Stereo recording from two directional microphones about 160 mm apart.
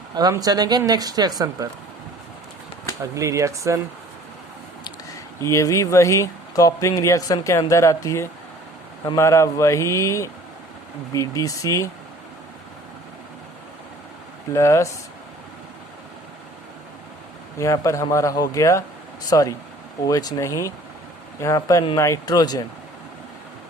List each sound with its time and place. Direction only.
0.1 s speech: 25° right (ahead or behind)
3.0 s speech: 20° right (ahead or behind)
4.8 s speech: 20° left (ahead or behind)
14.5 s speech: 20° left (ahead or behind)
17.6 s speech: 20° left (ahead or behind)